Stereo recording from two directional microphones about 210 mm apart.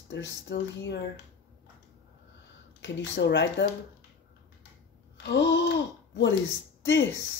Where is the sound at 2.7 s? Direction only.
60° left (ahead or behind).